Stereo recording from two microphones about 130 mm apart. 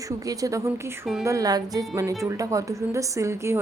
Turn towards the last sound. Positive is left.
turn(degrees=-20)  # may be behind; listen again after turning